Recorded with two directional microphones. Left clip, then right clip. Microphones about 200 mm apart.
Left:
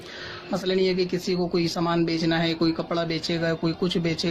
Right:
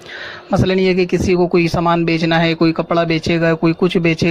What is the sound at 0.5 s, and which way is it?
Speech, 45° right (ahead or behind).